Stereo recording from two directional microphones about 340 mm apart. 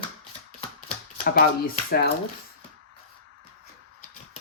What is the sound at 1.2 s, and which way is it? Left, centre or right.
Speech, left.